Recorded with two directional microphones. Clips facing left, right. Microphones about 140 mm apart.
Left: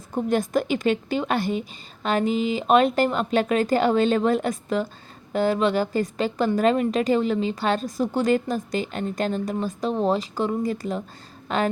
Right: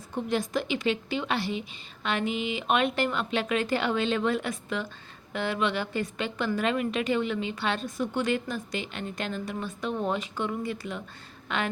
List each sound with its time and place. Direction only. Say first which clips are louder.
0.1 s a woman's voice: left 6 dB; 50° left (ahead or behind)